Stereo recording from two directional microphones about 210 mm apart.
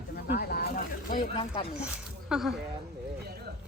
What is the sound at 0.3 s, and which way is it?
Snake, 45° left (ahead or behind).